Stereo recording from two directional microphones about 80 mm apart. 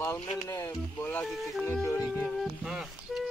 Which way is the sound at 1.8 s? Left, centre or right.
Left.